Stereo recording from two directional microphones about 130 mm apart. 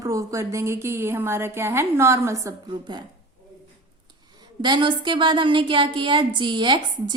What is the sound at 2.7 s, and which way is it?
Speech, 35° right (ahead or behind).